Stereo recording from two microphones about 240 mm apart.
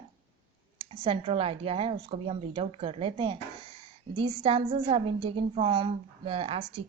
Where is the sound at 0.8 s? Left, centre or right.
Right.